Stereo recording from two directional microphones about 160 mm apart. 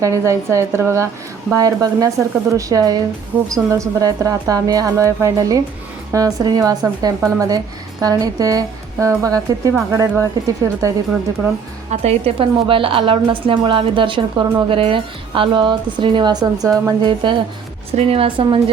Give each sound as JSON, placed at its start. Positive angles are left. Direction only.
{"t": 0.0, "sound": "speech", "side_deg": -20}
{"t": 11.9, "sound": "a woman's voice", "side_deg": -40}
{"t": 17.0, "sound": "a woman's voice", "side_deg": -30}